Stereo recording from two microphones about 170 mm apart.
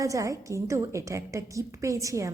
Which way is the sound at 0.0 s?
20° right (ahead or behind).